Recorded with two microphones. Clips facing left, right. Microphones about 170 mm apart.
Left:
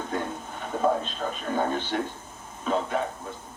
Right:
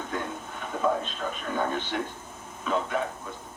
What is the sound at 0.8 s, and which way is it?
A man's voice, 30° left (ahead or behind).